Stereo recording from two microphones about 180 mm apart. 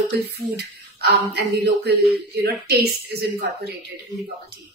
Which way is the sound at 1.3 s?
65° right (ahead or behind).